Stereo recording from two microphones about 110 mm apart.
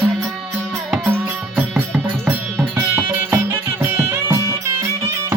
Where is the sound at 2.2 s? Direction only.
25° right (ahead or behind).